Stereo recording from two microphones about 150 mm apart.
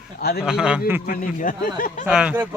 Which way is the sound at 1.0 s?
65° left (ahead or behind).